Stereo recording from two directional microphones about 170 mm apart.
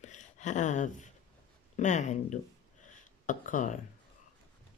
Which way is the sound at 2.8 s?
50° left (ahead or behind).